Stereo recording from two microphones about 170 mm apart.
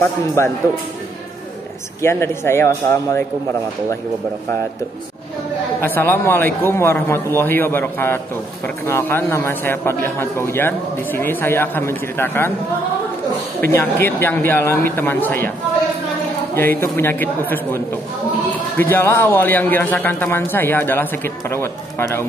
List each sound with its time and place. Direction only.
0.4 s a man's voice: 15° left (ahead or behind)
2.0 s a man's voice: 15° left (ahead or behind)
5.8 s a man's voice: 10° left (ahead or behind)
13.6 s a man's voice: 15° left (ahead or behind)
16.5 s a man's voice: 15° left (ahead or behind)